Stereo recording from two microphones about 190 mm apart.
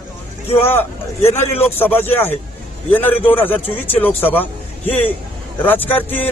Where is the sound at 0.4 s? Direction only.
30° left (ahead or behind).